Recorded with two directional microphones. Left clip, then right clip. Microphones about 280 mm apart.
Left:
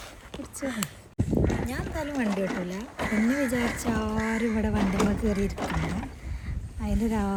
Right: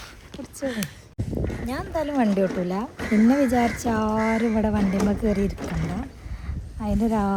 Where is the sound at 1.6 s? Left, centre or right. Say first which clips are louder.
Right 6 dB; centre.